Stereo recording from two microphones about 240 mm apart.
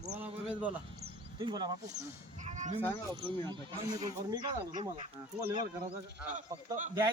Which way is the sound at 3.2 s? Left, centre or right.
Centre.